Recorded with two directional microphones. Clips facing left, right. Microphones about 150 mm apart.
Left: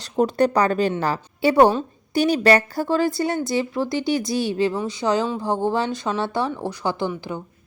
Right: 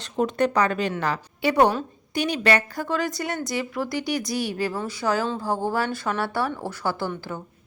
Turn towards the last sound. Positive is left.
turn(degrees=20)  # may be behind; listen again after turning